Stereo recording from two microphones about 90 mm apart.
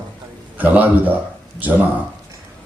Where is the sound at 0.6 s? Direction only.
20° right (ahead or behind).